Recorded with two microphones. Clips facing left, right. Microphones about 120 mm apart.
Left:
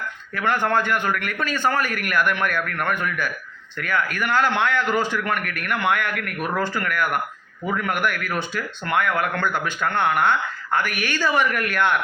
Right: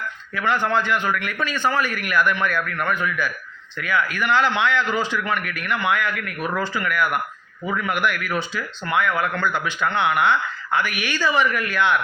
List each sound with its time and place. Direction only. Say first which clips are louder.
0.3 s speech: even; 50° left (ahead or behind)